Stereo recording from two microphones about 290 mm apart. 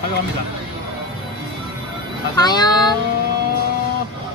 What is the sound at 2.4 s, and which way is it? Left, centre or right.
Speech, centre.